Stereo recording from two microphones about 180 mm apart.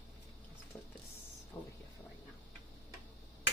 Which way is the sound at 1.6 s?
15° left (ahead or behind).